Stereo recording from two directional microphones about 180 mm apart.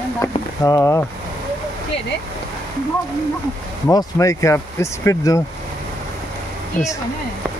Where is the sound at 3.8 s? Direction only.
20° left (ahead or behind).